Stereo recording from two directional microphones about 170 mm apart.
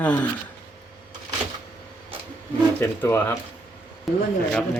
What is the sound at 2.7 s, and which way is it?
Speech, 10° left (ahead or behind).